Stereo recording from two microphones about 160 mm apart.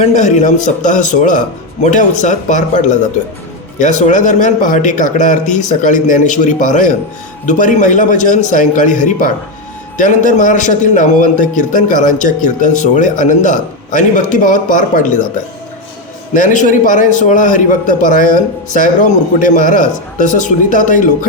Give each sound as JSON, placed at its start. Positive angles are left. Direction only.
{"t": 0.0, "sound": "a man's voice", "side_deg": 45}
{"t": 16.3, "sound": "a man's voice", "side_deg": 55}